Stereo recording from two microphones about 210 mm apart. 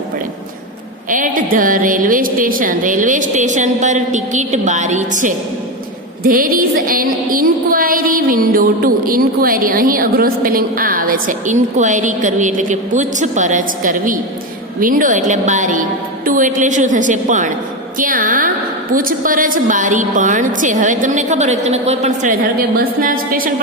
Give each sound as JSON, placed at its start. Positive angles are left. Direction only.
{"t": 1.1, "sound": "speech", "side_deg": -40}
{"t": 6.2, "sound": "music", "side_deg": -45}
{"t": 14.8, "sound": "a woman's voice", "side_deg": -40}